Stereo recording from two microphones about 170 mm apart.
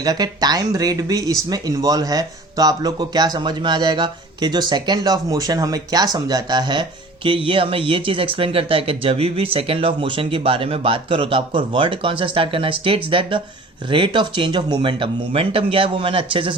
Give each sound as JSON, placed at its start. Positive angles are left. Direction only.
{"t": 0.0, "sound": "speech", "side_deg": -25}